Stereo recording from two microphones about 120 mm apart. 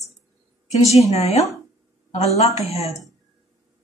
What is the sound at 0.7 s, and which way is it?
Speech, 65° left (ahead or behind).